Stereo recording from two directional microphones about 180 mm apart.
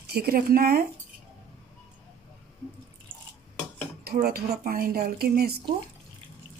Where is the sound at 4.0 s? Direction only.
60° right (ahead or behind).